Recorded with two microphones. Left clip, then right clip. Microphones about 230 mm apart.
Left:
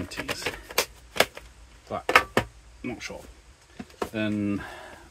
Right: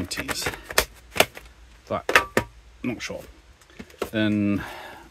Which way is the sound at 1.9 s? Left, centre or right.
Right.